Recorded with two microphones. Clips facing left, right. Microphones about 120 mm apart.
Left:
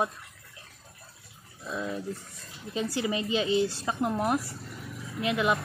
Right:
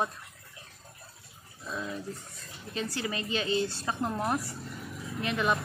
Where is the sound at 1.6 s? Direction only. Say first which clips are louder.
Left 3 dB; 10° left (ahead or behind).